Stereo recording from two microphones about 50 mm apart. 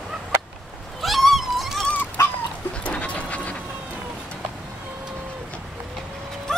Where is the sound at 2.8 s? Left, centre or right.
Left.